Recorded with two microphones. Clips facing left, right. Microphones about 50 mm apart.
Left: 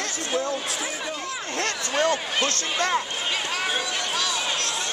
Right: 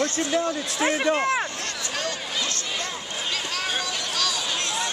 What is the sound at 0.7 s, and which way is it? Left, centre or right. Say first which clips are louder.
Speech: right 8 dB; right.